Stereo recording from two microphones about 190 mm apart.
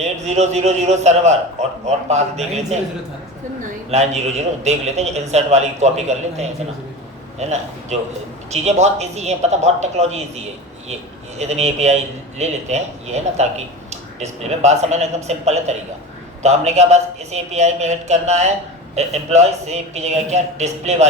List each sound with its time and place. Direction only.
0.0 s a man's voice: 35° right (ahead or behind)
3.9 s a man's voice: 35° right (ahead or behind)